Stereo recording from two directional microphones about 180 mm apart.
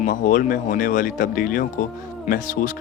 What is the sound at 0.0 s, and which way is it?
Speech, 50° left (ahead or behind).